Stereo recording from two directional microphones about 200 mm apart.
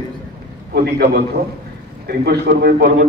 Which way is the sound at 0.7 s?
50° right (ahead or behind).